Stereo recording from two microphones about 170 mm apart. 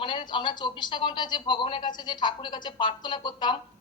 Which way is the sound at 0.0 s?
30° left (ahead or behind).